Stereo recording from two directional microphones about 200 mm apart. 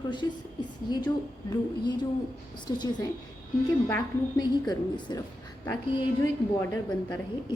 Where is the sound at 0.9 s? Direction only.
20° left (ahead or behind).